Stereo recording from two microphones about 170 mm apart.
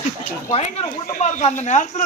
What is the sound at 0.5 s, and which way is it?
Speech, 40° left (ahead or behind).